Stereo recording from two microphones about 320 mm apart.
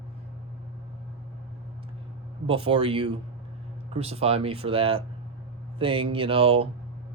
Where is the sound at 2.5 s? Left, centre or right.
Centre.